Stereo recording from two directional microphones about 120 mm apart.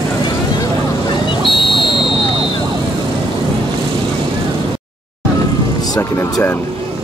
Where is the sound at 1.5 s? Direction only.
45° left (ahead or behind).